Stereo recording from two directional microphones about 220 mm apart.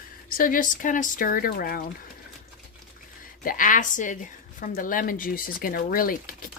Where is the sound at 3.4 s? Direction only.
40° left (ahead or behind).